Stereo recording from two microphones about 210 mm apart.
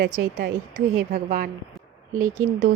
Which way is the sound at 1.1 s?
40° right (ahead or behind).